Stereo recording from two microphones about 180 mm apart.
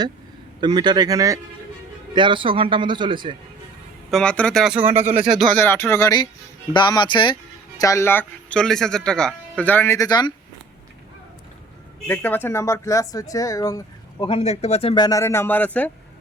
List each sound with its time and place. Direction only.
0.6 s speech: 25° right (ahead or behind)
4.1 s speech: 5° left (ahead or behind)
5.5 s a man's voice: 10° left (ahead or behind)
12.0 s a man's voice: 10° left (ahead or behind)
14.3 s speech: 35° left (ahead or behind); by 15.9 s 10° left (ahead or behind)